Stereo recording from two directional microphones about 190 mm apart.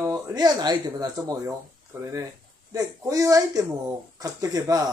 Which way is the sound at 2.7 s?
20° right (ahead or behind).